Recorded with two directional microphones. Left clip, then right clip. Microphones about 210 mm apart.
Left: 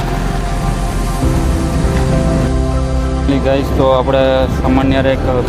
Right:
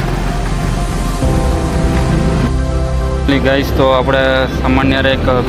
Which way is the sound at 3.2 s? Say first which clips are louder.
Right 2 dB; centre (ahead or behind).